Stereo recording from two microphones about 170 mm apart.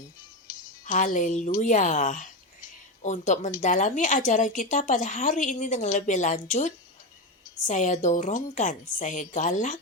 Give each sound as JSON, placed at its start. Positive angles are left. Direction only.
{"t": 0.9, "sound": "a woman's voice", "side_deg": 50}